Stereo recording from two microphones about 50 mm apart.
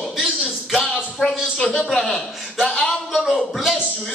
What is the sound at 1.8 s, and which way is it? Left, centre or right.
Speech, centre.